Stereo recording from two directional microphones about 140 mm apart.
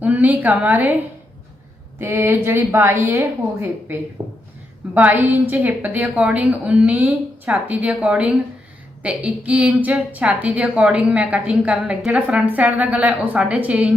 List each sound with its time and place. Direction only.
0.0 s a woman's voice: 10° right (ahead or behind)
2.0 s a woman's voice: 15° right (ahead or behind)
4.2 s a sound: 35° right (ahead or behind)
4.9 s a woman's voice: 15° right (ahead or behind)